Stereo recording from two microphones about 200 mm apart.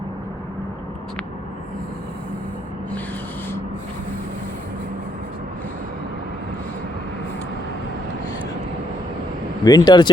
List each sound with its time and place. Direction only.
9.6 s speech: 20° left (ahead or behind)